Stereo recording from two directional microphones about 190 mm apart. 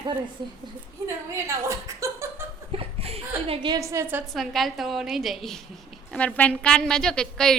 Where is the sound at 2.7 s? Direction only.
30° right (ahead or behind).